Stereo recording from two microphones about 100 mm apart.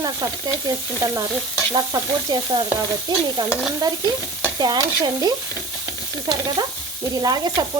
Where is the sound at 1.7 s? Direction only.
40° right (ahead or behind).